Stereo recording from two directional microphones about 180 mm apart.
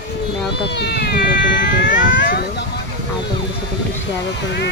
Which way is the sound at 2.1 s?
80° left.